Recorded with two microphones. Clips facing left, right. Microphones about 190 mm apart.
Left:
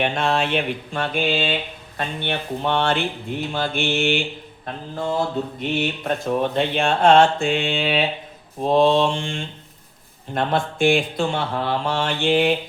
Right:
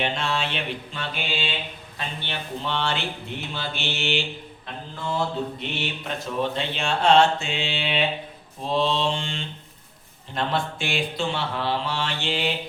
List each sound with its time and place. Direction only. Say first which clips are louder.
0.0 s music: left 5 dB; 55° left (ahead or behind)